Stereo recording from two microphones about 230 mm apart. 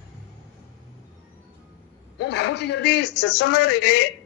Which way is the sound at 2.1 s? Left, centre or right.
Left.